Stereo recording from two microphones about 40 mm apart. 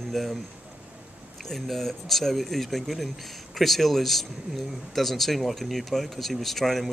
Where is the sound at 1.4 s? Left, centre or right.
Centre.